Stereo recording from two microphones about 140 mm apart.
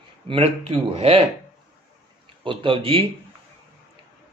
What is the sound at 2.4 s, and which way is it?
Speech, 40° right (ahead or behind).